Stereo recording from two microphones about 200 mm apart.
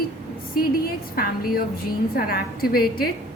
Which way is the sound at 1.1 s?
50° left (ahead or behind).